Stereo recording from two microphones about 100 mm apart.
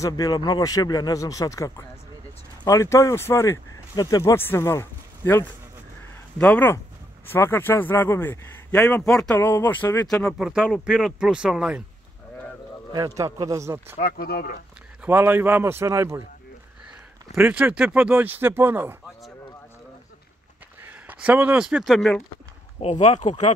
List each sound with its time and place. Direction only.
0.0 s a man's voice: 40° left (ahead or behind)
3.9 s speech: 45° left (ahead or behind)
4.2 s a man's voice: 25° left (ahead or behind); by 9.4 s 5° left (ahead or behind)
9.4 s a man's voice: 20° left (ahead or behind)
10.4 s speech: 10° right (ahead or behind)
12.9 s a man's voice: 35° right (ahead or behind)
15.0 s speech: 20° right (ahead or behind)
17.4 s speech: 15° right (ahead or behind)
20.8 s speech: 15° right (ahead or behind)
22.8 s speech: 90° left